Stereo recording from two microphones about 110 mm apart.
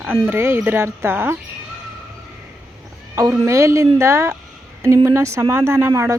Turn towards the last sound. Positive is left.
turn(degrees=-25)  # may be behind; listen again after turning